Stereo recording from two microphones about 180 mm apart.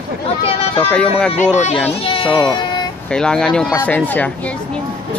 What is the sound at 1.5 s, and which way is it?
Speech, 40° left (ahead or behind).